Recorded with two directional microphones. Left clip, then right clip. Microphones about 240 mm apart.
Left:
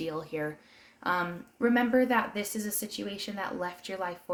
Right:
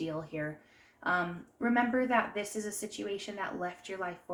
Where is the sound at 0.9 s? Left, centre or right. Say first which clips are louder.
Left 1 dB; left.